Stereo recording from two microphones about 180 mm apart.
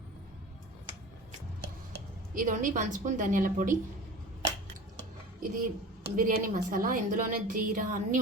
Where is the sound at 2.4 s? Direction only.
45° right (ahead or behind).